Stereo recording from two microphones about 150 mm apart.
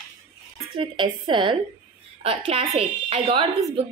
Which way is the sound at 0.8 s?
35° right (ahead or behind).